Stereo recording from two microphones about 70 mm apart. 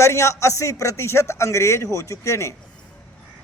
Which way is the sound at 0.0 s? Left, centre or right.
Left.